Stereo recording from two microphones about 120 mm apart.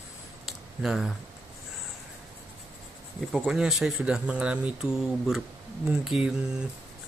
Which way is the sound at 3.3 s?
Centre (ahead or behind).